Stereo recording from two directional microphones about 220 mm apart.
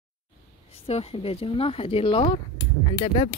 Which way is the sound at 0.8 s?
25° left (ahead or behind).